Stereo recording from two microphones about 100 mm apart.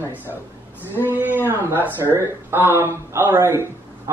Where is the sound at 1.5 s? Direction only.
20° right (ahead or behind).